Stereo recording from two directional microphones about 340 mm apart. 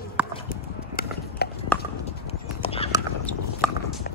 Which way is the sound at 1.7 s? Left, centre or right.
Centre.